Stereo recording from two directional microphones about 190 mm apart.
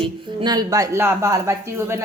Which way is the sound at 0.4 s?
20° right (ahead or behind).